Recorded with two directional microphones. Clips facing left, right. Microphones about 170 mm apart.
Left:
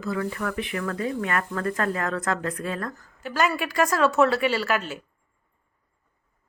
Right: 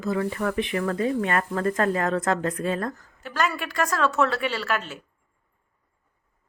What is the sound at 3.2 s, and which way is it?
A woman's voice, 5° left (ahead or behind).